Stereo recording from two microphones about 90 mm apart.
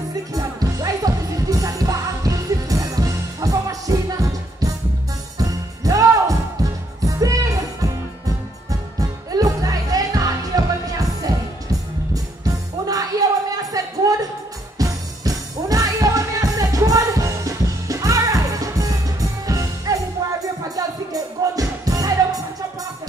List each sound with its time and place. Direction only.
0.3 s music: 40° right (ahead or behind)
9.3 s music: 40° right (ahead or behind)
13.6 s a sound: 40° right (ahead or behind)
14.8 s music: 40° right (ahead or behind)